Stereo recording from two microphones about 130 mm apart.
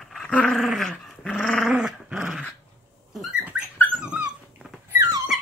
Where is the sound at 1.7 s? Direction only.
5° right (ahead or behind).